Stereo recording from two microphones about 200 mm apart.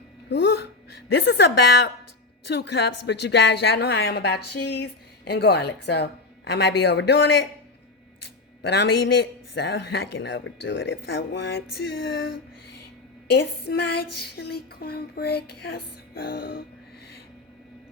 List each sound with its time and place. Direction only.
0.3 s a woman's voice: 60° left (ahead or behind)
8.6 s a woman's voice: 55° left (ahead or behind)
13.2 s a sound: 55° left (ahead or behind)